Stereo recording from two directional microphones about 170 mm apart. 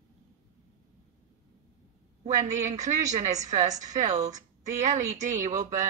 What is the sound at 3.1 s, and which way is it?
Speech, 40° right (ahead or behind).